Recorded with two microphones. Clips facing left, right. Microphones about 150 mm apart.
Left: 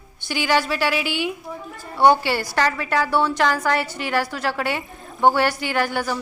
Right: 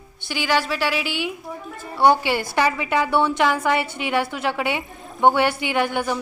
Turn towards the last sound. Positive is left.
turn(degrees=-20)  # may be behind; listen again after turning